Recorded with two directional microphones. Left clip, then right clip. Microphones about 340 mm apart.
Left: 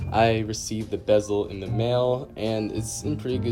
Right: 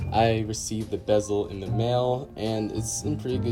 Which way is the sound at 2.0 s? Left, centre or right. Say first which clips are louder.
Left 3 dB; centre.